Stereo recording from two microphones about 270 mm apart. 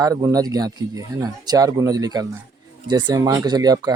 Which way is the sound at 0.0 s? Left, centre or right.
Centre.